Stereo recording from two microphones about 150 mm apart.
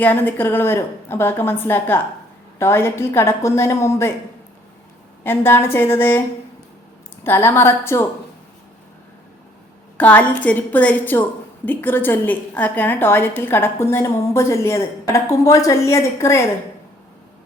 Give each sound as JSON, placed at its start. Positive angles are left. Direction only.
{"t": 0.0, "sound": "a woman's voice", "side_deg": 10}
{"t": 5.2, "sound": "a woman's voice", "side_deg": 15}
{"t": 7.3, "sound": "a woman's voice", "side_deg": 15}
{"t": 10.0, "sound": "a woman's voice", "side_deg": 10}